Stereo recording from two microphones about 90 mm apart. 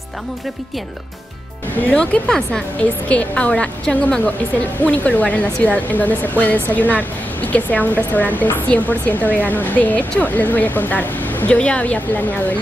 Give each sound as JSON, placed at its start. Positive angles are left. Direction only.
{"t": 1.9, "sound": "speech", "side_deg": 10}